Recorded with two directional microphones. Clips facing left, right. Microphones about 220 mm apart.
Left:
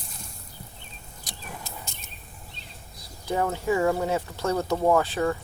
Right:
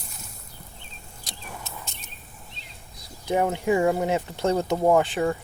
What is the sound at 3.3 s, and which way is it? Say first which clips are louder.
Speech: right 3 dB; 20° right (ahead or behind).